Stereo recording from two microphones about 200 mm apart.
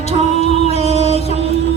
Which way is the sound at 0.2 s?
35° left (ahead or behind).